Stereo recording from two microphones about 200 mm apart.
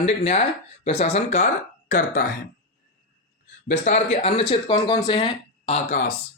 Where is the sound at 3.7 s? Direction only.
35° left (ahead or behind).